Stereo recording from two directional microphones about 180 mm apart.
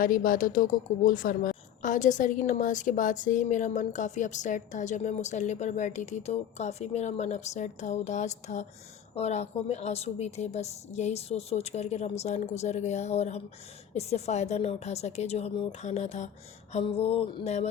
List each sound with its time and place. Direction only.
0.0 s a woman's voice: 50° left (ahead or behind)